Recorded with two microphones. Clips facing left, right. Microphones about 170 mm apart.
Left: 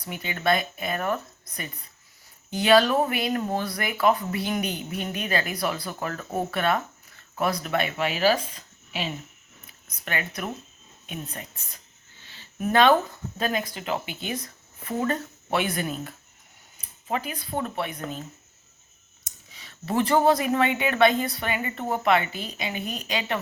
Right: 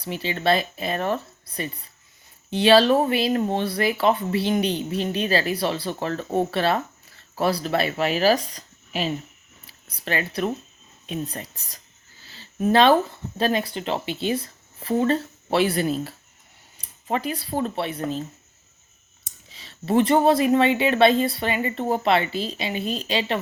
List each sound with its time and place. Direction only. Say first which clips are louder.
0.0 s speech: right 3 dB; 30° right (ahead or behind)
19.2 s speech: right 2 dB; 25° right (ahead or behind)